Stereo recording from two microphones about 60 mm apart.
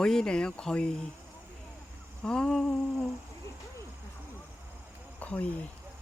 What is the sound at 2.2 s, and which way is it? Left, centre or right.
Speech, centre.